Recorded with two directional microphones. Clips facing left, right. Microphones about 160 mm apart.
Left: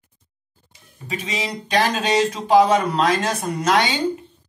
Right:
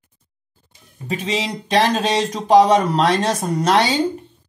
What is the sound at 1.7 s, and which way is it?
Speech, 35° right (ahead or behind).